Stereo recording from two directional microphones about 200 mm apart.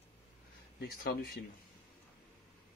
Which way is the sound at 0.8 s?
50° left (ahead or behind).